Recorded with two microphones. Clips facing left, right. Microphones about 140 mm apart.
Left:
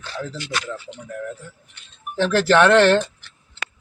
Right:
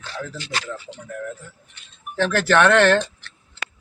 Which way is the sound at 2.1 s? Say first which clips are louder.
Left 2 dB; 15° left (ahead or behind).